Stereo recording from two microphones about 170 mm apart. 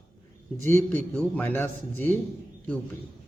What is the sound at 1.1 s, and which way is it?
Speech, 10° left (ahead or behind).